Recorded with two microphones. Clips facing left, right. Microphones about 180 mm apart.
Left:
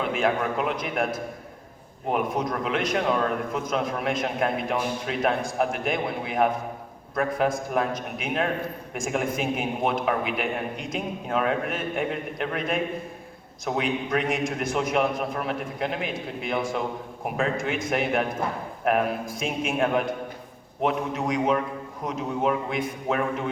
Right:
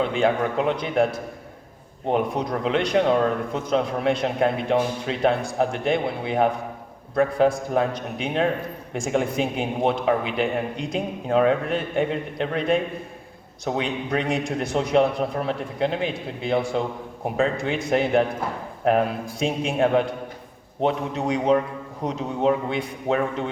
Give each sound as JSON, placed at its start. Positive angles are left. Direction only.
{"t": 0.1, "sound": "a man's voice", "side_deg": -30}
{"t": 2.0, "sound": "a man's voice", "side_deg": -30}
{"t": 18.9, "sound": "a man's voice", "side_deg": -30}